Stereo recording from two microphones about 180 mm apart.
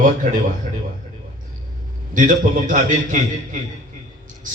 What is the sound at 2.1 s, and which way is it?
A man's voice, 45° right (ahead or behind).